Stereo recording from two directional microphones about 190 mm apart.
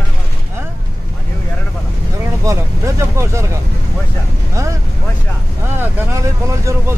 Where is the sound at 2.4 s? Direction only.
15° right (ahead or behind).